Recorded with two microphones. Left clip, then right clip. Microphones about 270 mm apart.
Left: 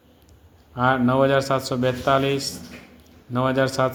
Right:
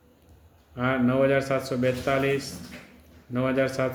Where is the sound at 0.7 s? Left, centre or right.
Centre.